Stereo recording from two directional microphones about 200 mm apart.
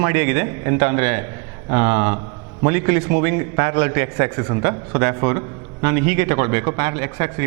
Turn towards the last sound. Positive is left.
turn(degrees=-15)  # may be behind; listen again after turning